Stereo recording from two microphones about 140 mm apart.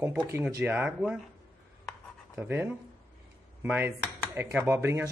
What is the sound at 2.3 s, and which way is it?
Speech, 15° right (ahead or behind).